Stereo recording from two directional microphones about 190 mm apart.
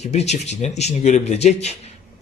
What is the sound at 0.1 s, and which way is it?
A man's voice, 35° left (ahead or behind).